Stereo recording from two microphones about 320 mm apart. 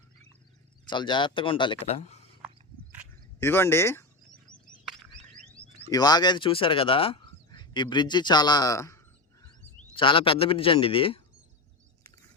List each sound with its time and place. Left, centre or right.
0.9 s speech: centre
3.4 s speech: centre
5.9 s speech: centre